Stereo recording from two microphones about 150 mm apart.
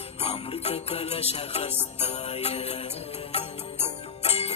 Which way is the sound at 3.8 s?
45° left (ahead or behind).